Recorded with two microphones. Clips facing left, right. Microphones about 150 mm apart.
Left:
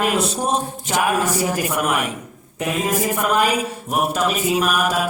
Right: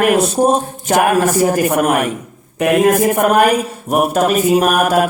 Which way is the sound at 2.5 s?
65° right (ahead or behind).